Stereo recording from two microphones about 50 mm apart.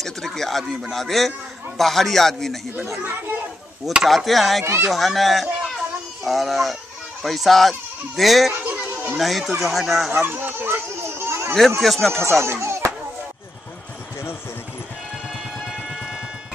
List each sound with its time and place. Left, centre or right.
0.0 s a sound: centre
0.9 s a man's voice: centre
4.0 s a man's voice: centre
8.6 s a sound: right
9.2 s a man's voice: centre
10.2 s run: right
11.1 s a sound: right
11.8 s a man's voice: centre
12.1 s speech: right